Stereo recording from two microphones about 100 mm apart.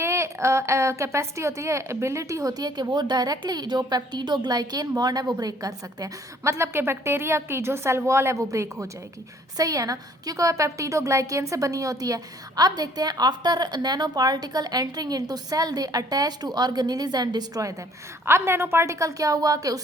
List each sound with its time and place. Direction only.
0.0 s a woman's voice: 30° right (ahead or behind)
18.3 s a woman's voice: 25° right (ahead or behind)